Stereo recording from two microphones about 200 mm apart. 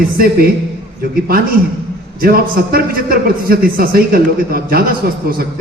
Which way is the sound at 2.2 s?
45° right (ahead or behind).